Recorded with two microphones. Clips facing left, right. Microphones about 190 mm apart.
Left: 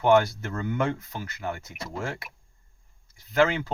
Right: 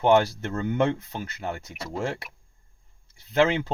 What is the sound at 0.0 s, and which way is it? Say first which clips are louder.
Speech: even; 30° right (ahead or behind).